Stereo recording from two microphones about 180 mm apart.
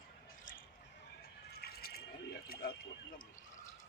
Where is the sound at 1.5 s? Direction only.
60° left (ahead or behind).